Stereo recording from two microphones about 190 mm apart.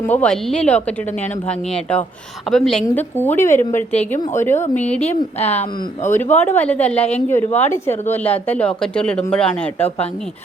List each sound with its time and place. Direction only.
0.1 s speech: 5° left (ahead or behind)
5.0 s speech: 35° left (ahead or behind)
6.1 s speech: 10° left (ahead or behind)